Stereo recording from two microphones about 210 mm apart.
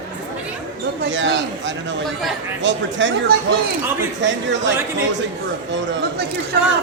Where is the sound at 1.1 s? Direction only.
60° right (ahead or behind).